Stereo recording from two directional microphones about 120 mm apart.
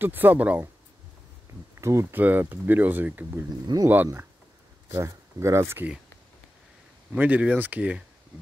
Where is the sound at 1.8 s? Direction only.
25° right (ahead or behind).